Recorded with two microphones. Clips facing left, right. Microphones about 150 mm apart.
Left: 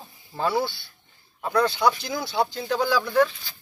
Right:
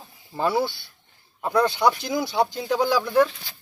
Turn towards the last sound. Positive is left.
turn(degrees=-15)  # may be behind; listen again after turning